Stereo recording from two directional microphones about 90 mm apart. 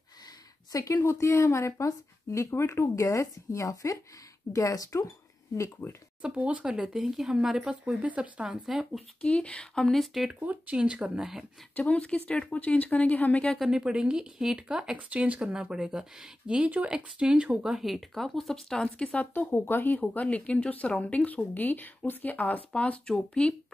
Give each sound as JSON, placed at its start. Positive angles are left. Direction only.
{"t": 0.7, "sound": "speech", "side_deg": 40}
{"t": 5.6, "sound": "speech", "side_deg": 25}
{"t": 6.2, "sound": "speech", "side_deg": -15}
{"t": 9.2, "sound": "speech", "side_deg": 15}
{"t": 10.4, "sound": "speech", "side_deg": -15}
{"t": 11.7, "sound": "speech", "side_deg": 15}
{"t": 13.6, "sound": "speech", "side_deg": -5}